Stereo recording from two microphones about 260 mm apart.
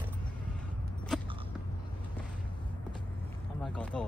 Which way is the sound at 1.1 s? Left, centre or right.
Centre.